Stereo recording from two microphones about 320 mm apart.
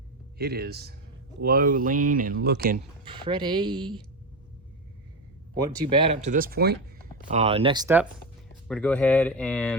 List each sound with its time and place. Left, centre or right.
0.3 s speech: right
3.1 s a woman's voice: centre
5.9 s a woman's voice: centre
8.6 s speech: centre